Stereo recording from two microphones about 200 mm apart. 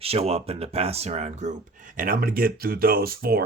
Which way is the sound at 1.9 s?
45° right (ahead or behind).